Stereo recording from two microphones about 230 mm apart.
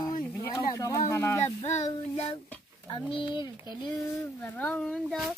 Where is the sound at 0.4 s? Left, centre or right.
Centre.